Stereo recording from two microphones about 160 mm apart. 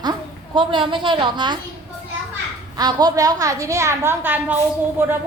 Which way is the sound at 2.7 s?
25° right (ahead or behind).